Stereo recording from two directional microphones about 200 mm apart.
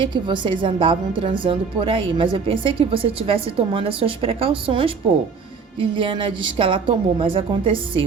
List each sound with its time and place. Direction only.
0.0 s speech: 25° right (ahead or behind)